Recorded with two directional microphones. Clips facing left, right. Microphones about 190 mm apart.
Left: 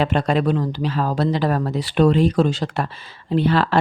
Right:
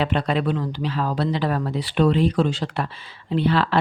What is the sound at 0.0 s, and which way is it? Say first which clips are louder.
Speech: left 3 dB; 45° left (ahead or behind).